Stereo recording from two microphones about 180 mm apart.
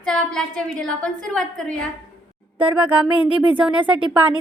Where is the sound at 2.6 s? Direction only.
10° right (ahead or behind).